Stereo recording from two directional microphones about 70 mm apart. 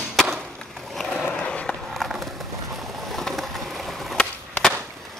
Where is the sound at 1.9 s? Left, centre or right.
Centre.